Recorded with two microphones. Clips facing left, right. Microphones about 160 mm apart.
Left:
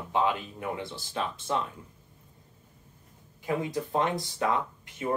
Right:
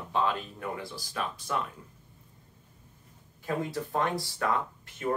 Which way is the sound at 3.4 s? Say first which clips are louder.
Left 2 dB; 15° left (ahead or behind).